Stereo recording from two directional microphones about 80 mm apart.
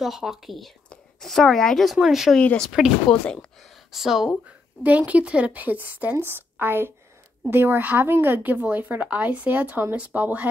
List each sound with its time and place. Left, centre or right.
0.0 s speech: centre
2.4 s speech: centre
3.9 s speech: centre
4.8 s speech: centre